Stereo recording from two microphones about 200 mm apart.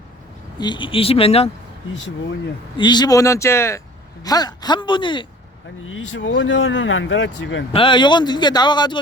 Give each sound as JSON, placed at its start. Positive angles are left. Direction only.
{"t": 0.6, "sound": "speech", "side_deg": 25}
{"t": 2.7, "sound": "speech", "side_deg": 20}
{"t": 5.8, "sound": "speech", "side_deg": 75}
{"t": 7.7, "sound": "speech", "side_deg": 25}